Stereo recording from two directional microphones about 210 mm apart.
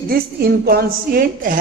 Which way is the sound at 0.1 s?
50° right (ahead or behind).